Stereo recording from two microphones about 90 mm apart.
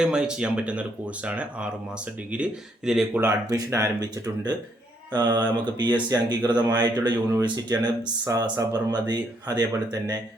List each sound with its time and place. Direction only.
0.0 s speech: 10° right (ahead or behind)
3.1 s speech: 25° right (ahead or behind)
3.5 s speech: 40° right (ahead or behind)
5.1 s speech: 50° right (ahead or behind)